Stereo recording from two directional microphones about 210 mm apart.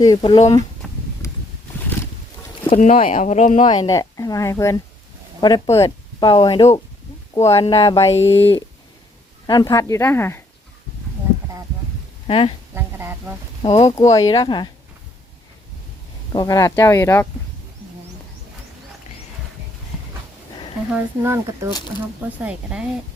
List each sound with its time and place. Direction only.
0.0 s speech: 20° left (ahead or behind)
0.8 s a sound: centre (ahead or behind)
1.2 s vehicle: 15° left (ahead or behind)
2.6 s speech: 35° left (ahead or behind)
3.7 s speech: 15° left (ahead or behind)
8.1 s speech: 30° left (ahead or behind)
9.5 s speech: 20° left (ahead or behind)
12.3 s speech: 25° left (ahead or behind)
12.7 s a sound: 10° right (ahead or behind)
13.6 s speech: 25° left (ahead or behind)
16.3 s speech: 20° left (ahead or behind)
20.9 s speech: 15° right (ahead or behind)